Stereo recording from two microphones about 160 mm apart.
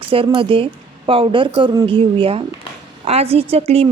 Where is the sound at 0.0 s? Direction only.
35° right (ahead or behind).